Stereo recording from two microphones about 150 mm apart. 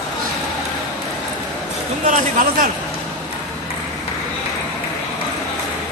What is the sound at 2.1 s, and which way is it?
Speech, 60° right (ahead or behind).